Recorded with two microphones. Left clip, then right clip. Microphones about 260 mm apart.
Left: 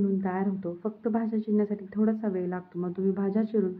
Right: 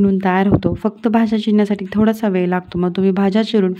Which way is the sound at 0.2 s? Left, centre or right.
Right.